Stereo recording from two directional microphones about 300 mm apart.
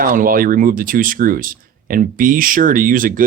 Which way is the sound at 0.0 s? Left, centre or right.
Right.